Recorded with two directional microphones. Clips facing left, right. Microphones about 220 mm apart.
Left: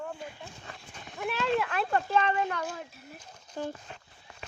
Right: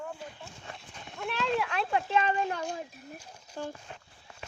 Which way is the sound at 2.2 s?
30° right (ahead or behind).